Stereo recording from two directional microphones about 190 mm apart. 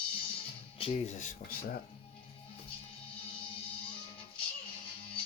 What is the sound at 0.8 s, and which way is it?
Speech, 40° left (ahead or behind).